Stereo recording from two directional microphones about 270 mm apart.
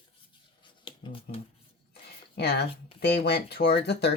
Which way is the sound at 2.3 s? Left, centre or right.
Left.